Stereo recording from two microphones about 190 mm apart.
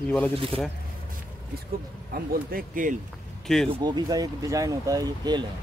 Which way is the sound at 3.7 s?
20° right (ahead or behind).